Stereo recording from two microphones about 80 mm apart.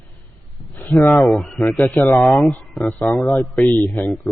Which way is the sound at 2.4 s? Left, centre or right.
Centre.